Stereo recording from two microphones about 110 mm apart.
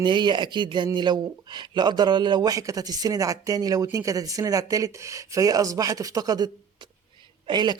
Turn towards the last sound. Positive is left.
turn(degrees=-40)  # may be behind; listen again after turning